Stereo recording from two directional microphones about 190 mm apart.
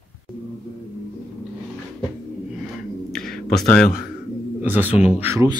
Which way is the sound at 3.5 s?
5° left (ahead or behind).